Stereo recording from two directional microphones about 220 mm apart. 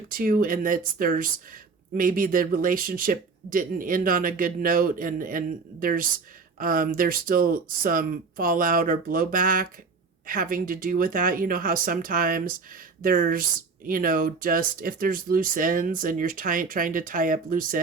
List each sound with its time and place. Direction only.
0.1 s speech: 40° right (ahead or behind)